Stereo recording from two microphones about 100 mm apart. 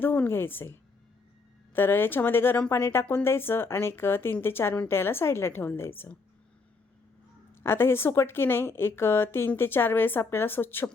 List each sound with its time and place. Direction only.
0.0 s a woman's voice: 20° left (ahead or behind)
7.6 s a woman's voice: 25° left (ahead or behind)